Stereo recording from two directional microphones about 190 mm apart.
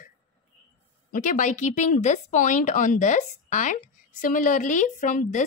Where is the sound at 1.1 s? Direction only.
40° left (ahead or behind).